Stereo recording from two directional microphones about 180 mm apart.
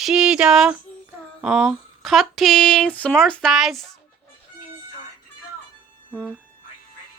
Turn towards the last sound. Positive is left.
turn(degrees=-10)  # may be behind; listen again after turning